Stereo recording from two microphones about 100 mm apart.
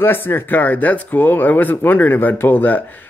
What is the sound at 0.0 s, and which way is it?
Speech, 20° left (ahead or behind).